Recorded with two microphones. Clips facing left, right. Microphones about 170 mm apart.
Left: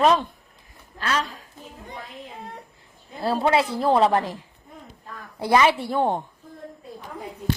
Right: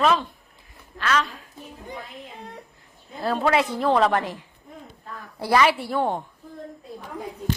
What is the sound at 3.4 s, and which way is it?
Speech, 30° left (ahead or behind).